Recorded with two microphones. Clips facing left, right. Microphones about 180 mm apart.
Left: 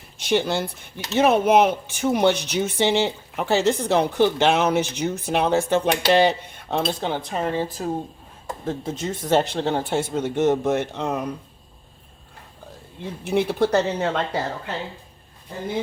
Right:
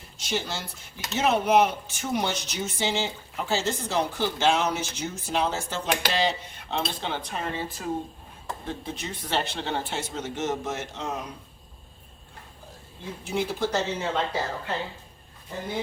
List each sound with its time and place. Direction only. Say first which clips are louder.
0.2 s speech: left 9 dB; 60° left (ahead or behind)
13.2 s speech: left 7 dB; 65° left (ahead or behind)